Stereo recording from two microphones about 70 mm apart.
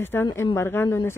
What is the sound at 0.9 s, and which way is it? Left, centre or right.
Speech, left.